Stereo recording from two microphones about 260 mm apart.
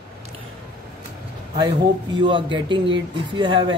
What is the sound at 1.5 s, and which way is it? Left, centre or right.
A man's voice, centre.